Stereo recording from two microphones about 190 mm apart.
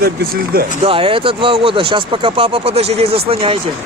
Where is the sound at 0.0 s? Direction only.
50° right (ahead or behind).